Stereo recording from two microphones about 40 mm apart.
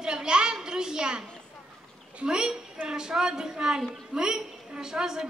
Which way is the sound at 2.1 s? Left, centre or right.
Centre.